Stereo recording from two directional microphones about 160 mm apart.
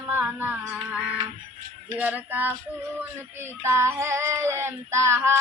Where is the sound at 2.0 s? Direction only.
10° right (ahead or behind).